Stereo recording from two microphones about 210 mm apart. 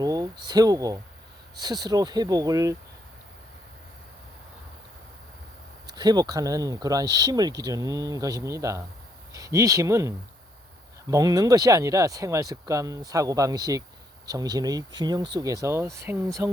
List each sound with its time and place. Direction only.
0.0 s speech: 20° right (ahead or behind)
6.0 s speech: 20° right (ahead or behind)